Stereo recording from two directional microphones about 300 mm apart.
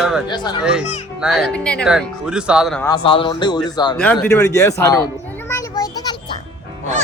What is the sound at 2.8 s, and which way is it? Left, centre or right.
Speech, centre.